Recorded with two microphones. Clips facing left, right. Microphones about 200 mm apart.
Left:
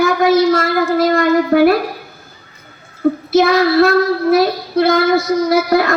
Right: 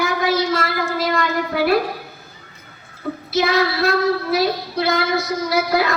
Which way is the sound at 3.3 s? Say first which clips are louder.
Left 6 dB; 50° left (ahead or behind).